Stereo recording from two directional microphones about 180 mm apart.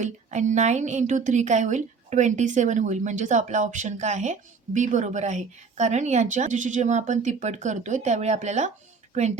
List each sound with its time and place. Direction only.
0.0 s a woman's voice: 40° right (ahead or behind)